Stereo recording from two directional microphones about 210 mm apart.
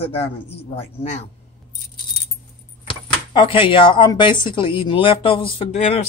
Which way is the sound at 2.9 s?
25° left (ahead or behind).